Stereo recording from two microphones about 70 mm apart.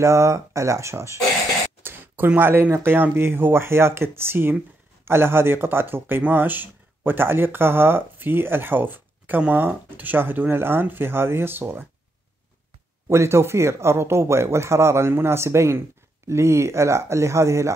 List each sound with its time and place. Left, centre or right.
0.0 s speech: right
1.8 s speech: right
9.4 s speech: centre
9.8 s speech: right
13.1 s speech: right